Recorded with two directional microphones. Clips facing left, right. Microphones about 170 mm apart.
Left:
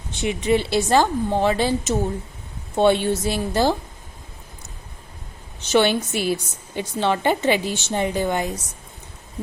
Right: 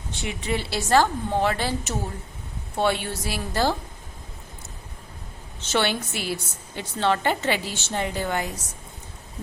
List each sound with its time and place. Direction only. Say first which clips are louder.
0.1 s a woman's voice: left 8 dB; 20° left (ahead or behind)
5.5 s a woman's voice: left 6 dB; 15° left (ahead or behind)